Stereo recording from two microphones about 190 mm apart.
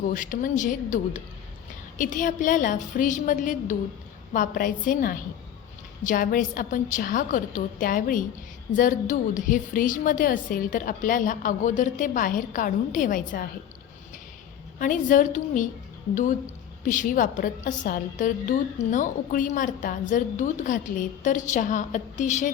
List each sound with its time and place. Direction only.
0.0 s a woman's voice: 45° left (ahead or behind)
14.8 s a woman's voice: 45° left (ahead or behind)
16.8 s a woman's voice: 45° left (ahead or behind)